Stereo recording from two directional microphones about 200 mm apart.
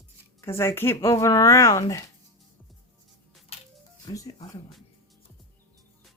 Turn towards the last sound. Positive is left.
turn(degrees=15)  # may be behind; listen again after turning